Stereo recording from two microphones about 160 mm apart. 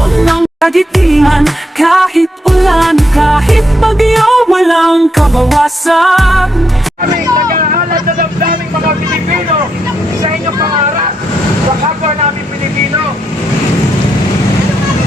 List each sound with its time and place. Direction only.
0.2 s music: centre (ahead or behind)
7.5 s vehicle: 60° right (ahead or behind)